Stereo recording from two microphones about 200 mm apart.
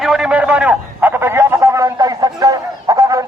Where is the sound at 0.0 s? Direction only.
Centre (ahead or behind).